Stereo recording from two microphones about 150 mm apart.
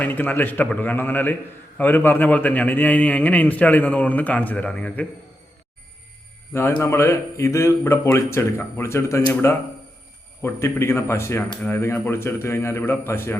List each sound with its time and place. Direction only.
0.0 s a man's voice: 10° left (ahead or behind)
6.5 s a man's voice: 15° left (ahead or behind)